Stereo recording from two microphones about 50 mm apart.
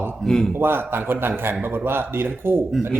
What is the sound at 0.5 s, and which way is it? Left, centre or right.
A man's voice, right.